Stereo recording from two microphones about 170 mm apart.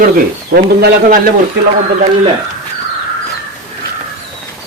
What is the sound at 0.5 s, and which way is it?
Speech, 65° right (ahead or behind).